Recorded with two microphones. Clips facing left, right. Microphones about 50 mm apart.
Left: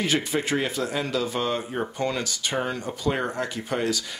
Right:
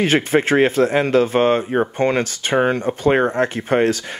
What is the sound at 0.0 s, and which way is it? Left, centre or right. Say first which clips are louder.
Speech: right 9 dB; right.